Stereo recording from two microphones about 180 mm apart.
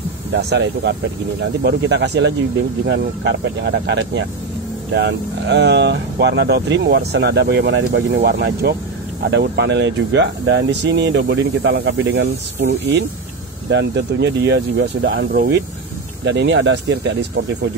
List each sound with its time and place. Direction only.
0.3 s speech: 70° right (ahead or behind)
13.7 s speech: 75° right (ahead or behind)
16.3 s speech: 80° right